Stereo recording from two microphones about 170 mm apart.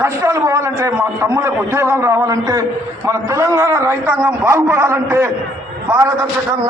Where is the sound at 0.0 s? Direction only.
15° right (ahead or behind).